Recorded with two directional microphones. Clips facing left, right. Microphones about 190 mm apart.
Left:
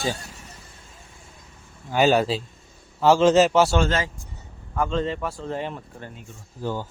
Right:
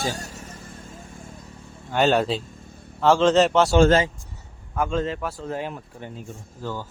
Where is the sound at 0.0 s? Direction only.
45° right (ahead or behind).